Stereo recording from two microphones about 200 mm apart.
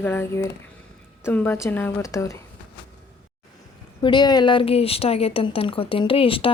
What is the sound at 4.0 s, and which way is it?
A woman's voice, 20° left (ahead or behind).